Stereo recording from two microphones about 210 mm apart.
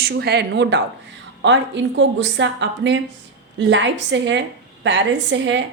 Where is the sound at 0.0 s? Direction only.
50° right (ahead or behind).